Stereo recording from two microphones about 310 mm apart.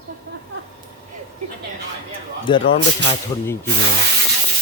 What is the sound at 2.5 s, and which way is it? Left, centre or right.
Speech, centre.